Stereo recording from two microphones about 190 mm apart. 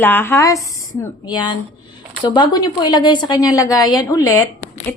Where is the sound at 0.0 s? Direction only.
10° left (ahead or behind).